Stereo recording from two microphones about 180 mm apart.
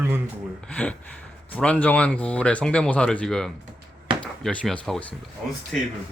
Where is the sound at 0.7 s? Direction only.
5° left (ahead or behind).